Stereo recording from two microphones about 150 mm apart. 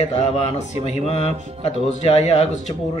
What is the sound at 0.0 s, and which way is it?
Speech, 45° left (ahead or behind).